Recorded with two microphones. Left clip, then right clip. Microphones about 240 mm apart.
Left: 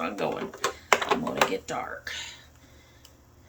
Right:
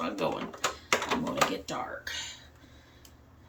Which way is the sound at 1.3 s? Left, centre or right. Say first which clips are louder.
Left 3 dB; centre.